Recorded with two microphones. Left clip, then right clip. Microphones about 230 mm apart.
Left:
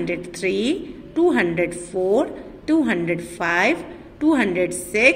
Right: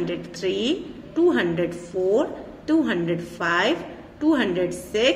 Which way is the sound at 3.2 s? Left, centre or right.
Left.